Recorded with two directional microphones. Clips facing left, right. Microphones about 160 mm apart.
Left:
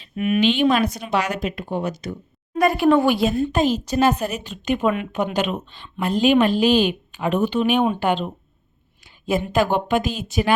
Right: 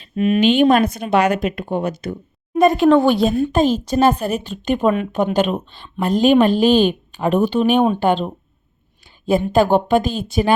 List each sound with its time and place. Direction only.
0.3 s speech: 45° right (ahead or behind)
2.6 s speech: 25° right (ahead or behind)
2.8 s a woman's voice: 10° left (ahead or behind)
3.8 s a woman's voice: 30° right (ahead or behind)